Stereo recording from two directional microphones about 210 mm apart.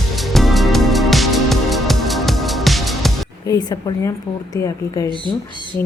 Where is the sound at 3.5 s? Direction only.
15° left (ahead or behind).